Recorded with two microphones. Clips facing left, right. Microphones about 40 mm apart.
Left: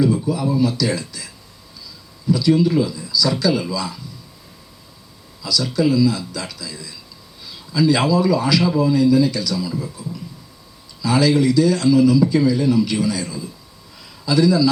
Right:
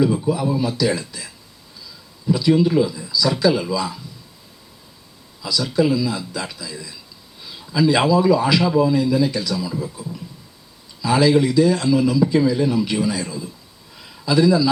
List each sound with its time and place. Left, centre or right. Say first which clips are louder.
0.0 s a man's voice: even; centre
5.4 s a man's voice: even; centre
14.0 s a sound: even; centre